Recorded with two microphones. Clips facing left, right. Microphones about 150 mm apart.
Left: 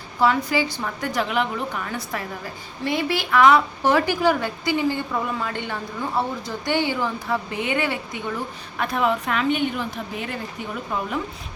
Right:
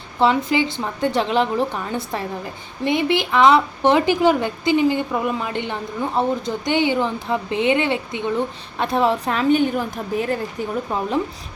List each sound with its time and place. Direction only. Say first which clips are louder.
0.2 s speech: right 3 dB; 25° right (ahead or behind)